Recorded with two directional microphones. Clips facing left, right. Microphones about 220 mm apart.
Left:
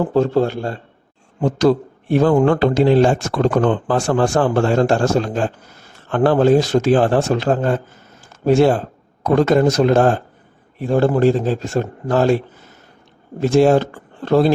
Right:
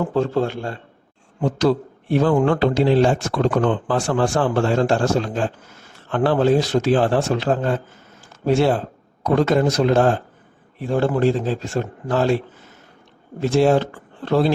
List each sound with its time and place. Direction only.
0.0 s a man's voice: 40° left (ahead or behind)
13.4 s a man's voice: 45° left (ahead or behind)